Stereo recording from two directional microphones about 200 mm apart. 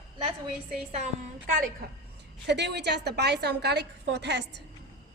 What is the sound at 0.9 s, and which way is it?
Speech, 35° right (ahead or behind).